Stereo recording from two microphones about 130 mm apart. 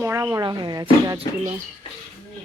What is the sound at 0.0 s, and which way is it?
Speech, 20° right (ahead or behind).